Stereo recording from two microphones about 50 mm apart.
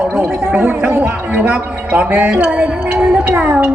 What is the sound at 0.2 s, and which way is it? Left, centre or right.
Speech, right.